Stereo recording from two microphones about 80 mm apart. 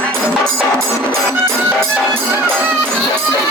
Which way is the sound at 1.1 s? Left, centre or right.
Right.